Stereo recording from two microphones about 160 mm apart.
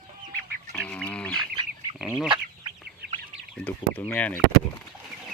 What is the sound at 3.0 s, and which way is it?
Chicken, 80° right.